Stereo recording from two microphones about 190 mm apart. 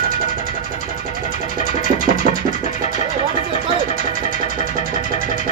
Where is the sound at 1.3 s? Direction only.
40° left (ahead or behind).